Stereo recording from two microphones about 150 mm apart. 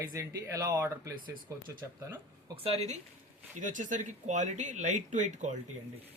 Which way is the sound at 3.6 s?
60° right (ahead or behind).